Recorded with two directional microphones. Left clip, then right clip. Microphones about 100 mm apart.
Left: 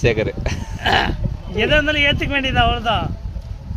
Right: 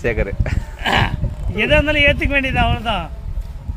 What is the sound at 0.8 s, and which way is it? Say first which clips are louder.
Speech: even; 40° left (ahead or behind).